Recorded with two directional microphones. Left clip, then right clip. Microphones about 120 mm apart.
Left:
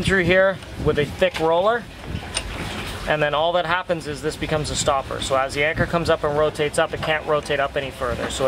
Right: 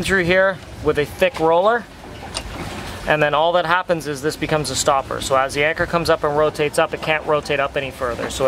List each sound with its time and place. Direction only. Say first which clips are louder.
0.0 s speech: right 1 dB; 25° right (ahead or behind)
3.1 s speech: right 4 dB; 25° right (ahead or behind)